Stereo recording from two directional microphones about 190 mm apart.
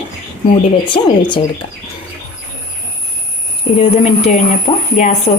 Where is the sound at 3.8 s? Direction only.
35° left (ahead or behind).